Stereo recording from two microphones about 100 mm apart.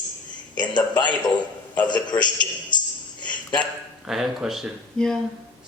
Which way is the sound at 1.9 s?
50° left (ahead or behind).